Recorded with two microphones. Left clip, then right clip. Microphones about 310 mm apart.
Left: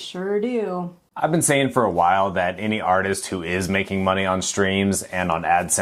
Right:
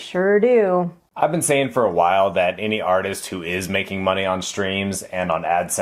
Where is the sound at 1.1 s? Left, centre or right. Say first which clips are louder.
Right 1 dB; left.